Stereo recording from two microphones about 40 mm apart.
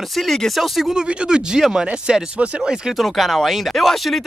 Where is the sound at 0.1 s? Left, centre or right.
Centre.